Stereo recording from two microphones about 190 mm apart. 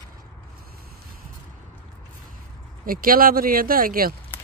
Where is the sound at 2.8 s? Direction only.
50° right (ahead or behind).